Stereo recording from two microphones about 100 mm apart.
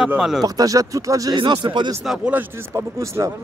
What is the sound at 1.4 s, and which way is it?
Speech, 55° right (ahead or behind).